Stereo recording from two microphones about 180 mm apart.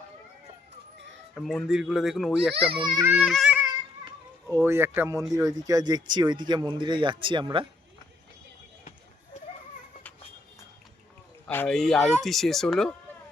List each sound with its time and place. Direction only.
1.4 s speech: centre (ahead or behind)
2.7 s speech: 25° right (ahead or behind)
3.0 s speech: 5° right (ahead or behind)
3.6 s babbling: 20° right (ahead or behind)
4.9 s speech: 15° right (ahead or behind)
11.4 s speech: 10° left (ahead or behind)